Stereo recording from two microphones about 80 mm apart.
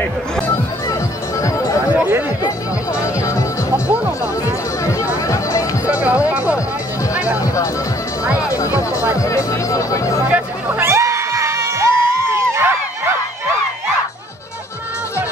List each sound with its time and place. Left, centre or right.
2.9 s music: left
3.7 s music: centre
4.8 s music: left
6.0 s music: centre
8.5 s music: left
10.3 s music: right
10.9 s crowd: right